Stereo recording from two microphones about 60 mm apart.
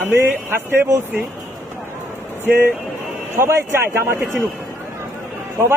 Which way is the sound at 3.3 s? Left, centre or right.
Right.